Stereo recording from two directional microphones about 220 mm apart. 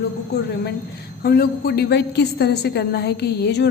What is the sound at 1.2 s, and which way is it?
A woman's voice, 45° left (ahead or behind).